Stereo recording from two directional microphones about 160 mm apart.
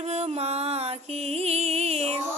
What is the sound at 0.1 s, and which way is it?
Music, 40° right (ahead or behind).